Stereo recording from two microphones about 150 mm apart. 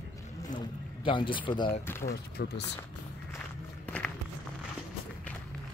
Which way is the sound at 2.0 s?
90° left.